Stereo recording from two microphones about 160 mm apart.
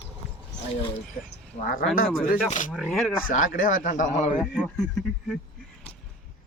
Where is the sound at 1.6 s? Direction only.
60° left (ahead or behind).